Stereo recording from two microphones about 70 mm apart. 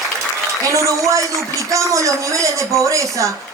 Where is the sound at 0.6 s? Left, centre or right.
Right.